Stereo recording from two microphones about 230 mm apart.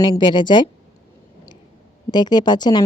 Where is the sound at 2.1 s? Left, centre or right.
Centre.